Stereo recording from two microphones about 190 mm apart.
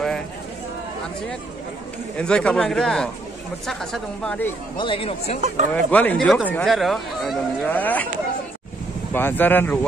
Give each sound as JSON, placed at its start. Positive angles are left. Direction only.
{"t": 2.1, "sound": "speech", "side_deg": 5}
{"t": 4.7, "sound": "speech", "side_deg": 25}
{"t": 5.7, "sound": "speech", "side_deg": 10}
{"t": 9.1, "sound": "speech", "side_deg": 10}